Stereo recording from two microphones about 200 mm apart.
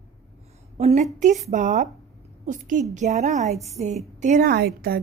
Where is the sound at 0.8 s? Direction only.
35° right (ahead or behind).